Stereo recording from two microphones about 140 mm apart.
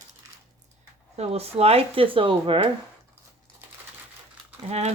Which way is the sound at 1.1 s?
45° right (ahead or behind).